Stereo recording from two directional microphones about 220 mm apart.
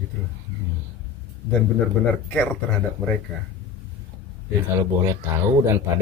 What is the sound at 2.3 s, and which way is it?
Speech, 5° left (ahead or behind).